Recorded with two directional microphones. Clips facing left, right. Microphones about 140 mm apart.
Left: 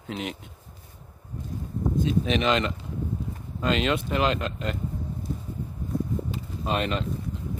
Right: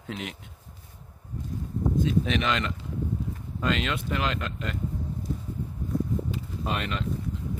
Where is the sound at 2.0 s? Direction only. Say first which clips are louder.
Left 4 dB; 20° left (ahead or behind).